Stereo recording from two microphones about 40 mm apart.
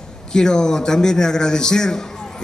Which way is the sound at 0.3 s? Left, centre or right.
Centre.